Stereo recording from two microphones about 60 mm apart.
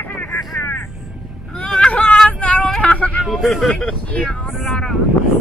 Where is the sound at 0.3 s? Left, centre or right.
Left.